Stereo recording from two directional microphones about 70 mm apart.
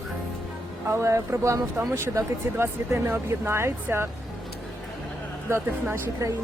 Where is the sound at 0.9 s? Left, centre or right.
Right.